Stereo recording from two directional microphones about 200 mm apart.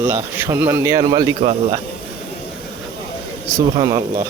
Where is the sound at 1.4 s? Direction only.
35° right (ahead or behind).